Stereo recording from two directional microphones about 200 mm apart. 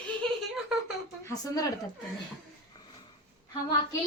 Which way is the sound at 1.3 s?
20° left (ahead or behind).